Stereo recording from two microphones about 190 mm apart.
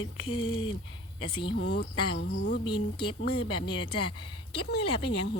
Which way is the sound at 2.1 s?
70° left (ahead or behind).